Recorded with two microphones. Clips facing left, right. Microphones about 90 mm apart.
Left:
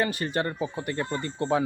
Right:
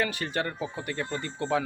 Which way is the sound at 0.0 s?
35° left (ahead or behind).